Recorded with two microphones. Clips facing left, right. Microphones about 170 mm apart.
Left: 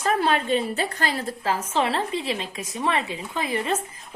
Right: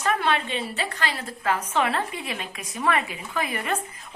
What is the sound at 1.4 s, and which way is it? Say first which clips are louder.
A woman's voice: even; 30° left (ahead or behind).